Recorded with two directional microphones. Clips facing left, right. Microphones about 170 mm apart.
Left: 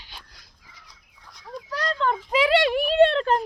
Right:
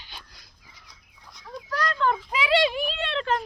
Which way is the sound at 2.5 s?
60° left (ahead or behind).